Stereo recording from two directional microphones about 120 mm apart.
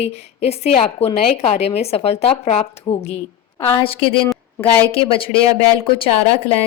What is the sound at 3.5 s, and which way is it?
Speech, 30° left (ahead or behind).